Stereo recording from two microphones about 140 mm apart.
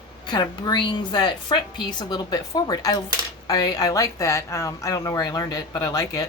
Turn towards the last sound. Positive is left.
turn(degrees=25)  # may be behind; listen again after turning